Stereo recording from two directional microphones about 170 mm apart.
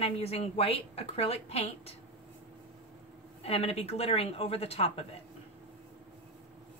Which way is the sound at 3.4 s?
35° left (ahead or behind).